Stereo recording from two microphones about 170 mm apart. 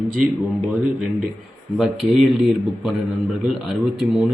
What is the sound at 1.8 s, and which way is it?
Speech, centre (ahead or behind).